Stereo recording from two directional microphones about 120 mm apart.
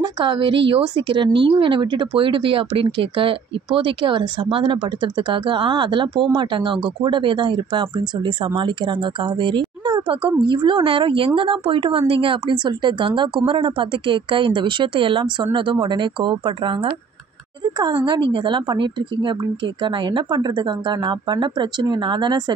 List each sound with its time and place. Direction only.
0.0 s a woman's voice: 40° right (ahead or behind)